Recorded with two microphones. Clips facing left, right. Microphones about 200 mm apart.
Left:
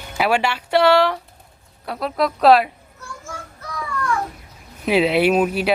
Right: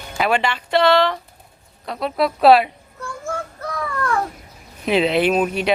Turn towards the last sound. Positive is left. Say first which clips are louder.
# left 1 dB
turn(degrees=5)  # may be behind; listen again after turning